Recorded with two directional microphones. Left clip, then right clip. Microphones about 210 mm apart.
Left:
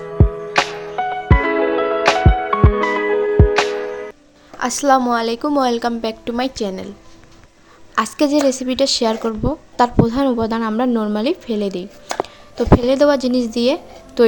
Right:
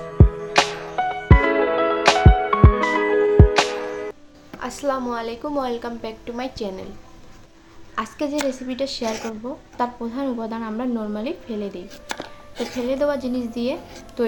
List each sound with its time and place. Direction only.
0.0 s music: centre (ahead or behind)
4.6 s a woman's voice: 50° left (ahead or behind)
7.9 s a woman's voice: 55° left (ahead or behind)